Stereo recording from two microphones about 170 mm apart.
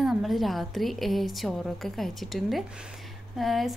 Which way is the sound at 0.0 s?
Centre (ahead or behind).